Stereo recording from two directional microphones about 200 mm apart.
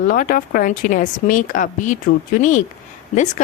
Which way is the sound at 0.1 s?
45° left (ahead or behind).